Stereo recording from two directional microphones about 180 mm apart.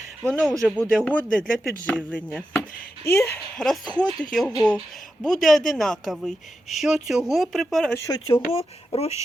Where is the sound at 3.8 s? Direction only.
25° left (ahead or behind).